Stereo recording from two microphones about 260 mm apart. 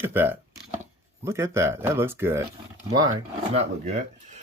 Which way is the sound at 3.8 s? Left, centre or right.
Right.